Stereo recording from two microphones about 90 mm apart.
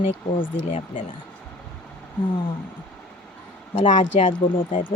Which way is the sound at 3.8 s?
75° left (ahead or behind).